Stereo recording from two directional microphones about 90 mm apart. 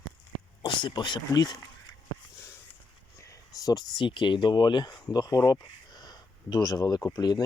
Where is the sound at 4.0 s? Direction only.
60° left (ahead or behind).